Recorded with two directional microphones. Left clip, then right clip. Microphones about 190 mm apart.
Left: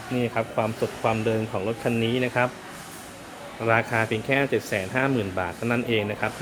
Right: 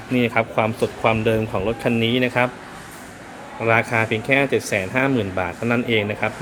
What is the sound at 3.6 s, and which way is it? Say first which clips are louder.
Speech: right 4 dB; 5° right (ahead or behind).